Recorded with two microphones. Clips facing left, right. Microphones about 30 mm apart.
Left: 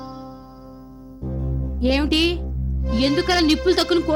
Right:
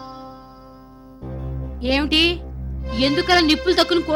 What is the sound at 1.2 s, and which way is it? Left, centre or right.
Music, right.